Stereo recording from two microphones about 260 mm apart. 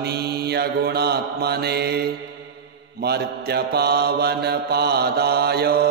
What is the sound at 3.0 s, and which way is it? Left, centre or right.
Mantra, right.